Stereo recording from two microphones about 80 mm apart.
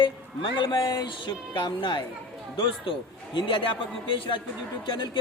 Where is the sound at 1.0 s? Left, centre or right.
Left.